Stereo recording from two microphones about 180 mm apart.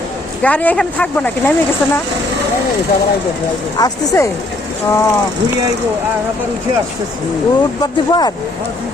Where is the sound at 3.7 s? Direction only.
20° left (ahead or behind).